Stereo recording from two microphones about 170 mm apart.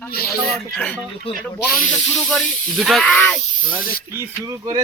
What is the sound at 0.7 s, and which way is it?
Speech, 5° left (ahead or behind).